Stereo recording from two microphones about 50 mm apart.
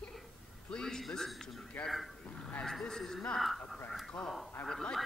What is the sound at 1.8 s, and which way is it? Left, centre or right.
Speech, left.